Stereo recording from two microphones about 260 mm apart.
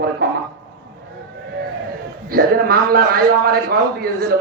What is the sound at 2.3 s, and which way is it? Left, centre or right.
A man's voice, right.